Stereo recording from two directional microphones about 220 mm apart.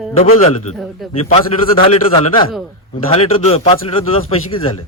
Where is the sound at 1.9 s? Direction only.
25° left (ahead or behind).